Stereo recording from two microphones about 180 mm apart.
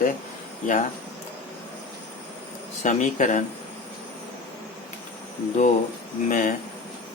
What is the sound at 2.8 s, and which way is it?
Speech, 40° left (ahead or behind).